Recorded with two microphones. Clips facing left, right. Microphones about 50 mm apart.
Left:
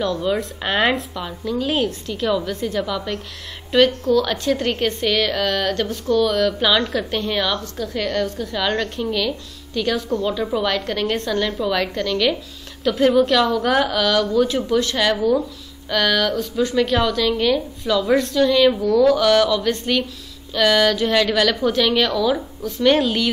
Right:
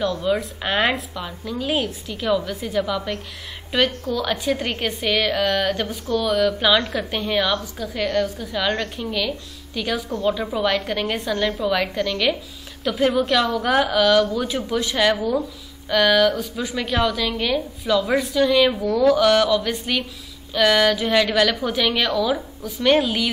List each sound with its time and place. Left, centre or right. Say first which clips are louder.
0.3 s a woman's voice: even; centre